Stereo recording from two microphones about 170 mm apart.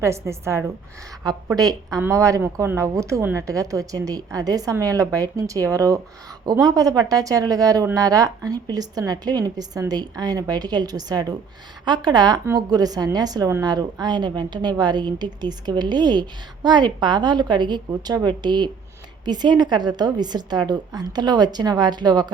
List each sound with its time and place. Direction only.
0.0 s a woman's voice: 15° right (ahead or behind)